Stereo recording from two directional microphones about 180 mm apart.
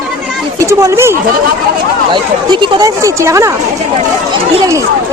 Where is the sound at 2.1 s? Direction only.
25° right (ahead or behind).